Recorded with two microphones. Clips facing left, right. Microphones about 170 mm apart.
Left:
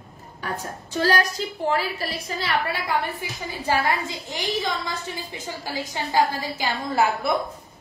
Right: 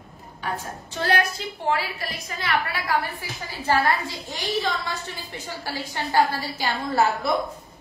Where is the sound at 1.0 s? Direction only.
35° left (ahead or behind).